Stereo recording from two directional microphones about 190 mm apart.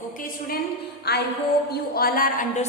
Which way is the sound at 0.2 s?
50° left (ahead or behind).